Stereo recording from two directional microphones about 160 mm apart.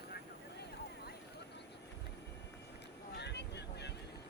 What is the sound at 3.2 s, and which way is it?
Vehicle, 90° left.